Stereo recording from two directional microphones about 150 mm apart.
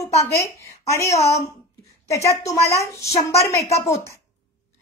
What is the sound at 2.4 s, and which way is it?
A woman's voice, 20° left (ahead or behind).